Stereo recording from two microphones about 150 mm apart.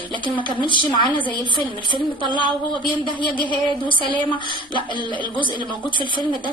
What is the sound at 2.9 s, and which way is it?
Speech, 30° right (ahead or behind).